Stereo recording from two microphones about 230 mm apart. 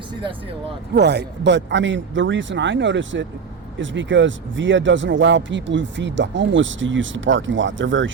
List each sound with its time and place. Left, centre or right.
0.9 s speech: right